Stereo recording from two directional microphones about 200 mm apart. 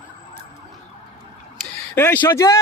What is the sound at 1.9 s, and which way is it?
Speech, 10° left (ahead or behind).